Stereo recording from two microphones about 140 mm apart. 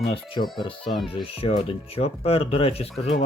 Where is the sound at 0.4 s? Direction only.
40° left (ahead or behind).